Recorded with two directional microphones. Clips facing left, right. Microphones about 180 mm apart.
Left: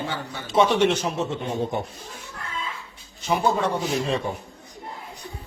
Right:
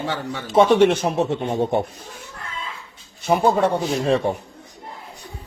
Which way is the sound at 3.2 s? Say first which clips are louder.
Right 5 dB; 60° right (ahead or behind).